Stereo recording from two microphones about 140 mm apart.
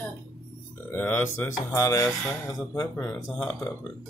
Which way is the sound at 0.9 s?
15° left (ahead or behind).